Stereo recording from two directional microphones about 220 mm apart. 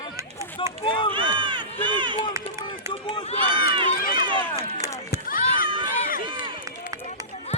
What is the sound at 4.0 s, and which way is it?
Run, 40° left (ahead or behind).